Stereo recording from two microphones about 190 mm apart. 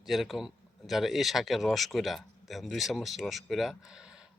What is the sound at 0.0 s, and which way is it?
Speech, centre (ahead or behind).